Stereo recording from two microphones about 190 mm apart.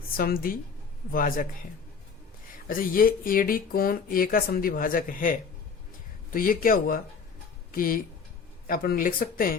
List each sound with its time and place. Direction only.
0.2 s speech: 50° left (ahead or behind)
2.6 s speech: 50° left (ahead or behind)